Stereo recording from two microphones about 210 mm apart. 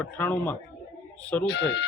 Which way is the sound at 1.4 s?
50° left (ahead or behind).